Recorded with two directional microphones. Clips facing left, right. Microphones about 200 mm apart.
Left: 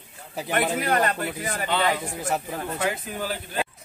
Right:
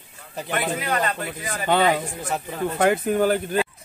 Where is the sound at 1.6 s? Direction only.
50° right (ahead or behind).